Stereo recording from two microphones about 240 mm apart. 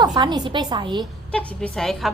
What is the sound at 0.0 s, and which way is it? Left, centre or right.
A woman's voice, centre.